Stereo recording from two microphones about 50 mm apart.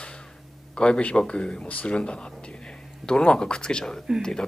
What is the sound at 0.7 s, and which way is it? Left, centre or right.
Speech, left.